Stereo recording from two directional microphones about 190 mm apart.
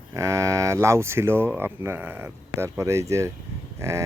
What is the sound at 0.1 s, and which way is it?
Speech, 15° right (ahead or behind).